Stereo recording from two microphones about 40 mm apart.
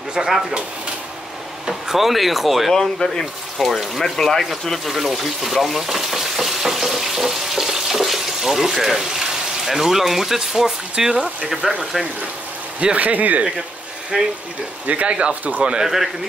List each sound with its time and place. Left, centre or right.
0.4 s speech: centre
1.7 s speech: centre
2.7 s speech: centre
3.5 s speech: centre
4.8 s frying: centre
12.9 s speech: right
14.1 s speech: centre
14.9 s speech: right
15.8 s speech: centre